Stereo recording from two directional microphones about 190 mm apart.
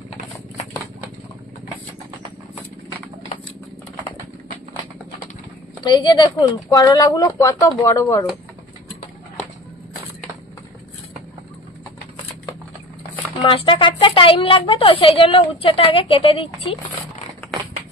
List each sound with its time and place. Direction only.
5.9 s a woman's voice: 25° left (ahead or behind)
13.4 s a woman's voice: 25° left (ahead or behind)